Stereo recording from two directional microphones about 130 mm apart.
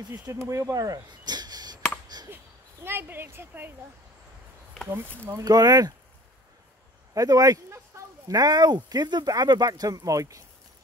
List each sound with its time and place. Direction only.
0.1 s speech: 20° right (ahead or behind)
2.2 s speech: 15° right (ahead or behind)
5.2 s speech: 25° right (ahead or behind)
7.2 s speech: 25° right (ahead or behind)